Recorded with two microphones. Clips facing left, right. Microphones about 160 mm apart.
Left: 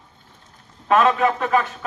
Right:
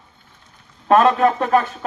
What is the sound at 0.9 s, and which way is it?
Speech, 40° right (ahead or behind).